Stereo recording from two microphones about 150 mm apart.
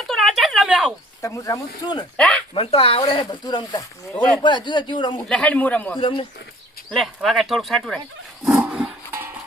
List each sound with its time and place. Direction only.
0.0 s a sound: centre (ahead or behind)
1.2 s speech: 20° left (ahead or behind)
2.1 s speech: 10° left (ahead or behind)
2.6 s speech: 40° left (ahead or behind)
5.1 s speech: 10° left (ahead or behind)
6.0 s speech: 35° left (ahead or behind)
6.9 s speech: centre (ahead or behind)
8.7 s a sound: 10° right (ahead or behind)